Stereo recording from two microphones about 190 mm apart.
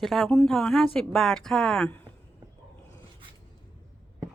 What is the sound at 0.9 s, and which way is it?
A woman's voice, 5° left (ahead or behind).